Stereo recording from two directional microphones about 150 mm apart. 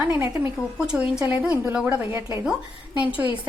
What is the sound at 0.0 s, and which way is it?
A woman's voice, 10° right (ahead or behind).